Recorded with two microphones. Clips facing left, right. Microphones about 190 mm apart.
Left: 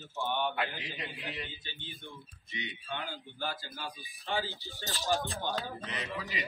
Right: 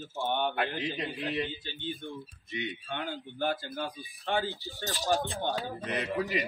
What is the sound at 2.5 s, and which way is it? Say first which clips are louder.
A man's voice: right 4 dB; 55° right (ahead or behind).